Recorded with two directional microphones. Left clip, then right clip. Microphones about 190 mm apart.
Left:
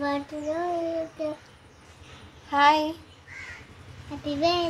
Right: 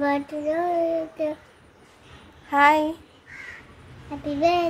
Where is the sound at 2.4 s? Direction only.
15° right (ahead or behind).